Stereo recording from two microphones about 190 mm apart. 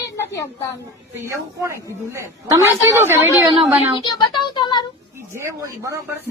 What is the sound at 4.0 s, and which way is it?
Speech, 25° left (ahead or behind).